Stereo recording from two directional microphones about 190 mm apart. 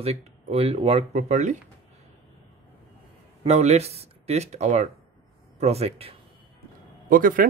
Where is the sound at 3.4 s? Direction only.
35° right (ahead or behind).